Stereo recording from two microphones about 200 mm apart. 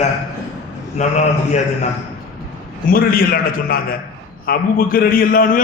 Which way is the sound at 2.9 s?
45° left (ahead or behind).